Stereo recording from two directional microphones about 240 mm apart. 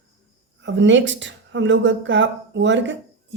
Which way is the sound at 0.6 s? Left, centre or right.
Right.